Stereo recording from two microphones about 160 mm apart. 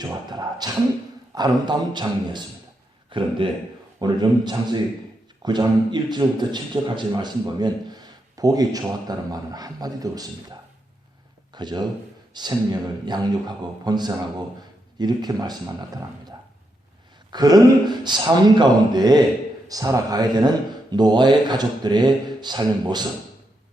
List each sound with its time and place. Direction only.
0.0 s a man's voice: 25° right (ahead or behind)
17.3 s a man's voice: 25° right (ahead or behind)